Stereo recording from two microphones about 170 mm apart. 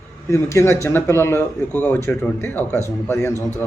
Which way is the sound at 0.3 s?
15° left (ahead or behind).